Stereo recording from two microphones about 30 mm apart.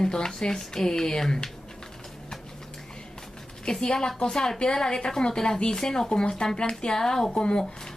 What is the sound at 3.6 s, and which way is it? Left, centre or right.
Speech, left.